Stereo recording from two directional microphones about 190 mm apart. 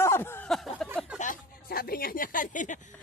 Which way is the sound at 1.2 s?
50° left (ahead or behind).